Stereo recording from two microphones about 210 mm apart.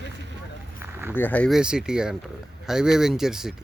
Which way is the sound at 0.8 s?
10° right (ahead or behind).